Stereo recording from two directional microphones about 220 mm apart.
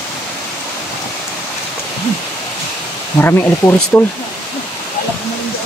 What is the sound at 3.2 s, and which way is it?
Speech, 10° left (ahead or behind).